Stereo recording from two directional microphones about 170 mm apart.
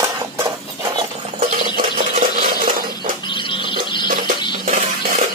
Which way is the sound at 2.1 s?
50° right (ahead or behind).